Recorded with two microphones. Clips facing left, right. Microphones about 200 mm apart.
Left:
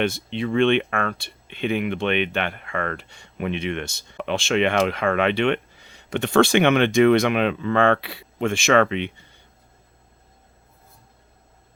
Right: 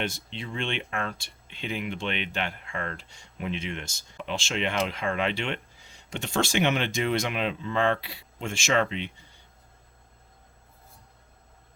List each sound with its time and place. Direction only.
0.0 s speech: 60° left (ahead or behind)